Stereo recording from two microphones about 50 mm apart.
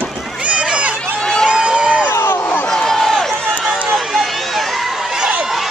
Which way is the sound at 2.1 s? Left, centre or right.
Left.